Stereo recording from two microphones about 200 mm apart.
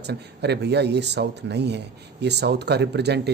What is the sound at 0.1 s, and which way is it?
Speech, 55° right (ahead or behind).